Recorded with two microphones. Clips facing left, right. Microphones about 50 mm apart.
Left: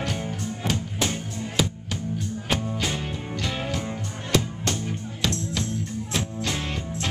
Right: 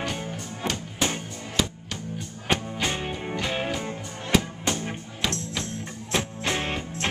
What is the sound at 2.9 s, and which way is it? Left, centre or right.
Music, right.